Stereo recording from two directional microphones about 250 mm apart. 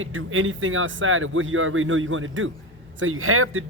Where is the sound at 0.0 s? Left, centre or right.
Right.